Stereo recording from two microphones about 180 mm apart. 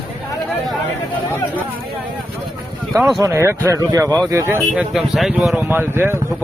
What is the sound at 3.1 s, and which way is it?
Speech, 15° right (ahead or behind).